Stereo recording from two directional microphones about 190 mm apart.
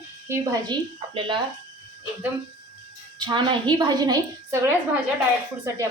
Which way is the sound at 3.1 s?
25° right (ahead or behind).